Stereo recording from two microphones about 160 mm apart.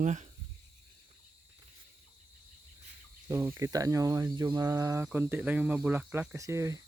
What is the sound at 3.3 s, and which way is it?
Speech, 15° right (ahead or behind).